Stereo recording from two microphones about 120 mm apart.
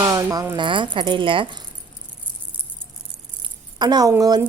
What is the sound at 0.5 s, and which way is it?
Speech, 45° right (ahead or behind).